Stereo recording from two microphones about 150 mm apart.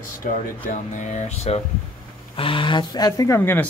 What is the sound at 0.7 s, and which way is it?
Speech, 55° left (ahead or behind).